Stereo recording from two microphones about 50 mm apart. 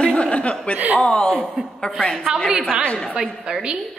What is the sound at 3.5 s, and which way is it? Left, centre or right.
Speech, right.